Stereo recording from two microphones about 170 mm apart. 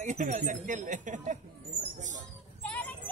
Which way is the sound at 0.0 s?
50° right (ahead or behind).